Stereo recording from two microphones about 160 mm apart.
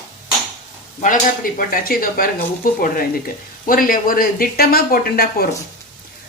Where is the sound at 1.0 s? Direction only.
55° left (ahead or behind).